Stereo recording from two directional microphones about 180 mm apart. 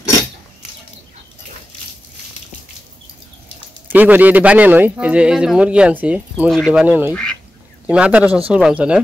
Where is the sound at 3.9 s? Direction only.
10° right (ahead or behind).